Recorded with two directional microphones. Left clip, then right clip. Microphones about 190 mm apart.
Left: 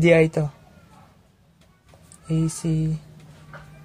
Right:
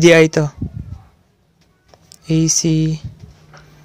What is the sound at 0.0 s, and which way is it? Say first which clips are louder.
Speech: right 7 dB; 30° right (ahead or behind).